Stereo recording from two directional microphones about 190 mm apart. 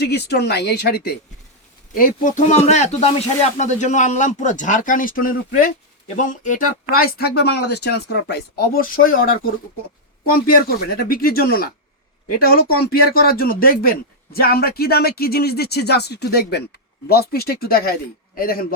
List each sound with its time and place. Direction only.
0.0 s speech: 60° left (ahead or behind)
2.0 s speech: 45° left (ahead or behind)
6.9 s speech: 55° left (ahead or behind)